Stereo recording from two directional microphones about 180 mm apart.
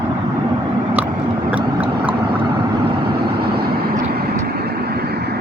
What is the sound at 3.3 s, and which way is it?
Vehicle, 60° right (ahead or behind).